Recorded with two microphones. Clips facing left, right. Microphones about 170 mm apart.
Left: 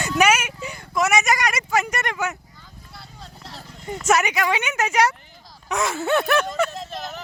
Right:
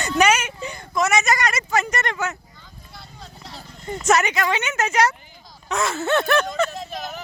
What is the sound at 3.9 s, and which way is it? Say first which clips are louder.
Speech: right 1 dB; 10° left (ahead or behind).